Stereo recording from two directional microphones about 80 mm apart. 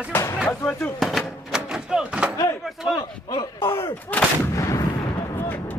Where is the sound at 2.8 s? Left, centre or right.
Left.